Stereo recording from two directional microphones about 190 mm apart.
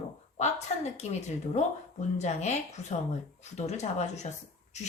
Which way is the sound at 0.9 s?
35° left (ahead or behind).